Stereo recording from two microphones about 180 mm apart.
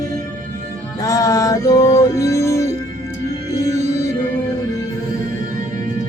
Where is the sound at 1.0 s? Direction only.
20° left (ahead or behind).